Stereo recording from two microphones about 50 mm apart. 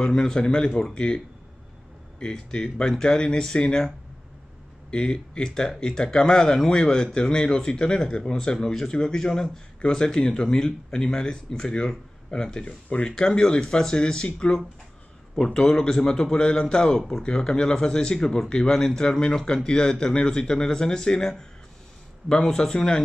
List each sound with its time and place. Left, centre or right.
0.0 s speech: centre
4.9 s speech: centre